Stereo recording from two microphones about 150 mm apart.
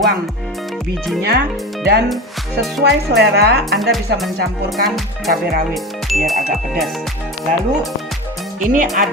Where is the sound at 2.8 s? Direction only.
90° right.